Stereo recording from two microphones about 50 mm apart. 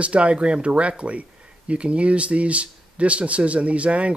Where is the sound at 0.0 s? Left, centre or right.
Right.